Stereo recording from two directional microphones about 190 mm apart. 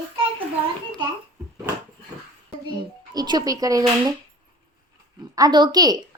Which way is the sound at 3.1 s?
20° right (ahead or behind).